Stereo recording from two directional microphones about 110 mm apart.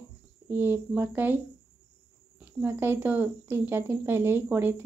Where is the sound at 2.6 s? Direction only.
20° right (ahead or behind).